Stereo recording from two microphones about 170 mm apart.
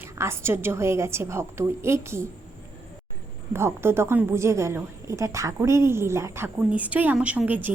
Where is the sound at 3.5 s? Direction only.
15° right (ahead or behind).